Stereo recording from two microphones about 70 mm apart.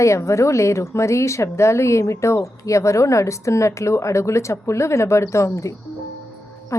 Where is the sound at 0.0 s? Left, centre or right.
Left.